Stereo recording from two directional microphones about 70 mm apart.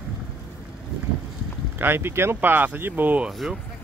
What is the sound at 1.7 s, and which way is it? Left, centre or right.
Speech, right.